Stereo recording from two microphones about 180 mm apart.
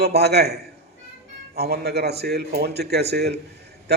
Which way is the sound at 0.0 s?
65° right (ahead or behind).